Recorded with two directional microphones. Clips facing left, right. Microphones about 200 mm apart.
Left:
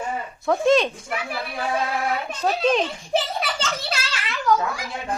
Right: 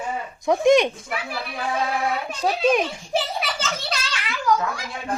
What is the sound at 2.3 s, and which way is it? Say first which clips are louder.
Speech: right 1 dB; 10° right (ahead or behind).